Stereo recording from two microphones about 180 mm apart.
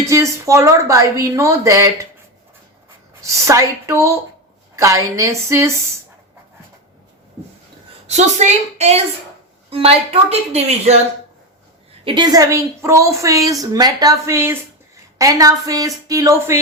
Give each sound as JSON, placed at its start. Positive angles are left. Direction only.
{"t": 0.1, "sound": "speech", "side_deg": -15}
{"t": 3.3, "sound": "speech", "side_deg": -15}
{"t": 8.0, "sound": "a woman's voice", "side_deg": -40}
{"t": 12.0, "sound": "a woman's voice", "side_deg": -25}